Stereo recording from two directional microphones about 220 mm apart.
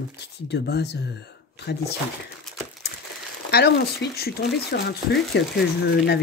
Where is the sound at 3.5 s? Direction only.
45° left (ahead or behind).